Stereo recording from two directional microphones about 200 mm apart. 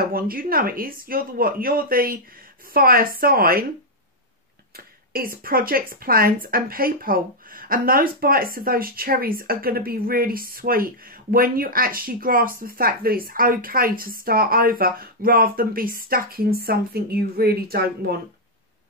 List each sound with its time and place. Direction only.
0.1 s speech: 45° right (ahead or behind)
4.7 s speech: 45° right (ahead or behind)